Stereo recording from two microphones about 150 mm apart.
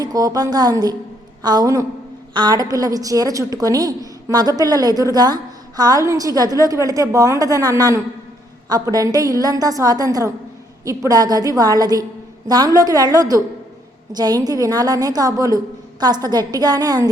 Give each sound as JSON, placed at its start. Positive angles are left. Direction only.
{"t": 0.0, "sound": "a woman's voice", "side_deg": -25}